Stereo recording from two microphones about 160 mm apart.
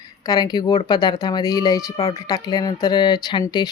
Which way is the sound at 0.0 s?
25° left (ahead or behind).